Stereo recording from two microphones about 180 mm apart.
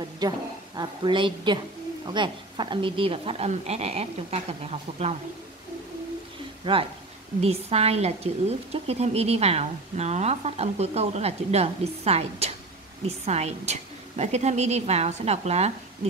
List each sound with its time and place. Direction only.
0.2 s a woman's voice: 20° right (ahead or behind)
6.6 s a woman's voice: 30° right (ahead or behind)